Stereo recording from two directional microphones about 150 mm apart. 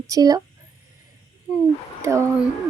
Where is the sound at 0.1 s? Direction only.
25° right (ahead or behind).